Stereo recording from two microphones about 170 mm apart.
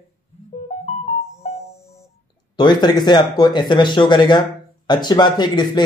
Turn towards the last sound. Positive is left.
turn(degrees=25)  # may be behind; listen again after turning